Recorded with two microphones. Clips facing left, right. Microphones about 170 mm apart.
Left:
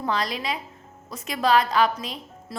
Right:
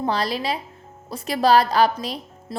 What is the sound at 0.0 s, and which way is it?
Speech, 35° right (ahead or behind).